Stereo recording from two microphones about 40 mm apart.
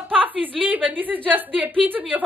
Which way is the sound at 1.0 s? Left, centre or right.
Right.